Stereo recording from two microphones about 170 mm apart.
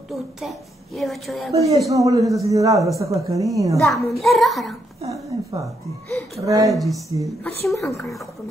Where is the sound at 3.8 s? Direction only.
Centre (ahead or behind).